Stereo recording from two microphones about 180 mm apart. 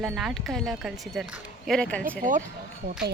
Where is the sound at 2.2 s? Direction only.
45° right (ahead or behind).